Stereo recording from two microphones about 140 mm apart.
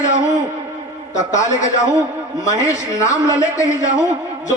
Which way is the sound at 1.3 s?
25° left (ahead or behind).